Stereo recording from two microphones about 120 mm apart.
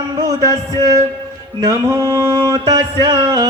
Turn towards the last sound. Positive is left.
turn(degrees=-35)  # may be behind; listen again after turning